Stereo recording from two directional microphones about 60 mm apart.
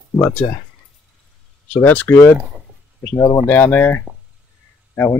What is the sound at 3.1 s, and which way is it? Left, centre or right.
Speech, left.